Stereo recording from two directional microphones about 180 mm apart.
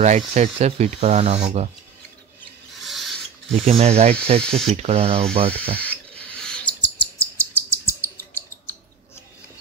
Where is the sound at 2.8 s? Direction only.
Centre (ahead or behind).